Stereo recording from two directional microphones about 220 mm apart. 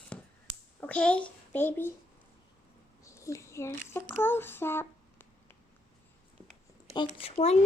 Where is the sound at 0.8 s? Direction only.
5° left (ahead or behind).